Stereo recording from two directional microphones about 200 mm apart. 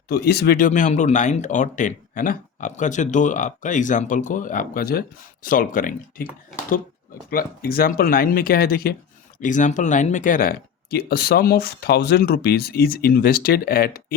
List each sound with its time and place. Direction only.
0.1 s speech: 50° left (ahead or behind)
7.3 s speech: 50° left (ahead or behind)